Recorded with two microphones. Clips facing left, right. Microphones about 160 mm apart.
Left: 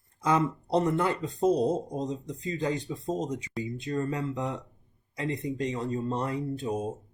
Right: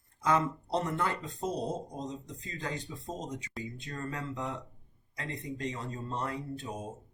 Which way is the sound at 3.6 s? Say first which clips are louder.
Left 11 dB; 15° left (ahead or behind).